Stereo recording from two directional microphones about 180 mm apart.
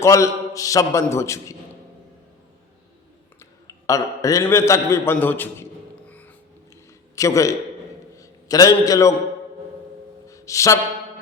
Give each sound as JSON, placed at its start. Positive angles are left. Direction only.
{"t": 0.0, "sound": "a man's voice", "side_deg": 15}
{"t": 3.8, "sound": "a man's voice", "side_deg": 20}
{"t": 6.1, "sound": "music", "side_deg": 10}
{"t": 7.2, "sound": "a man's voice", "side_deg": 20}
{"t": 10.2, "sound": "music", "side_deg": 20}